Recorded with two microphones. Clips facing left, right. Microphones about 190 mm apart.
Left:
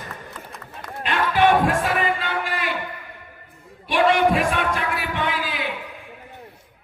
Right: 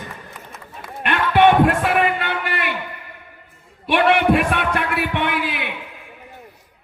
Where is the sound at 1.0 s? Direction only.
65° right (ahead or behind).